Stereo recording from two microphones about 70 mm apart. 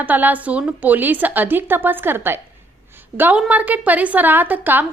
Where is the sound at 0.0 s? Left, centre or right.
Right.